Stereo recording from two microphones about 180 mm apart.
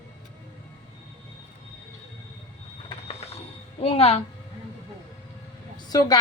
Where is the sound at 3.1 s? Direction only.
35° left (ahead or behind).